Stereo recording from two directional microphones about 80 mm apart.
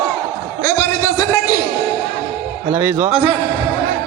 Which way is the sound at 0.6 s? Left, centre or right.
Left.